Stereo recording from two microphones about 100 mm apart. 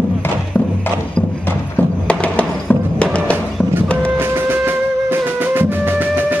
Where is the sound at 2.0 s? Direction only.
15° left (ahead or behind).